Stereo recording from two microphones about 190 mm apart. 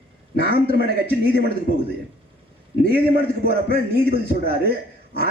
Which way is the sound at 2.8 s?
55° right (ahead or behind).